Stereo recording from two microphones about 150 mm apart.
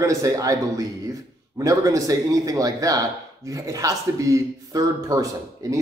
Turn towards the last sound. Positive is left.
turn(degrees=-20)  # may be behind; listen again after turning